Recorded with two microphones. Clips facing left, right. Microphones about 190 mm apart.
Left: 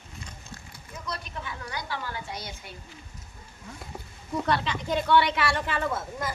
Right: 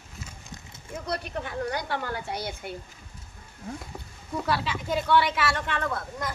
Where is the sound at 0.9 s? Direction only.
60° right (ahead or behind).